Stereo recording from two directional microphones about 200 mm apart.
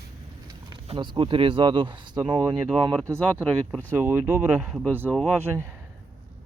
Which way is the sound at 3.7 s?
10° left (ahead or behind).